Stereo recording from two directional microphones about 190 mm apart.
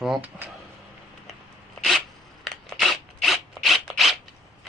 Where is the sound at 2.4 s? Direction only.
Centre (ahead or behind).